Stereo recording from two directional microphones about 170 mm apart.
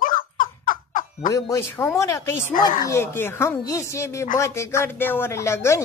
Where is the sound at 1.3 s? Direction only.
20° left (ahead or behind).